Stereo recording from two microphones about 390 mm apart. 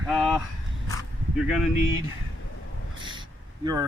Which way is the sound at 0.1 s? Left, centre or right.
Centre.